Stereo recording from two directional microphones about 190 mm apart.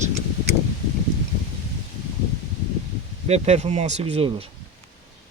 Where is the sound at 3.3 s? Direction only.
35° right (ahead or behind).